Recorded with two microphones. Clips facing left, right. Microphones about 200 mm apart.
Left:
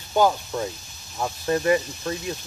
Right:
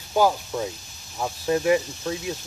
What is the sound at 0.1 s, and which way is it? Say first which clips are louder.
Speech: even; 5° right (ahead or behind).